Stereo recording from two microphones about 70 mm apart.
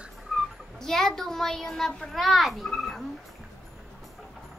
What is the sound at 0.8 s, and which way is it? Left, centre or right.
A child's voice, centre.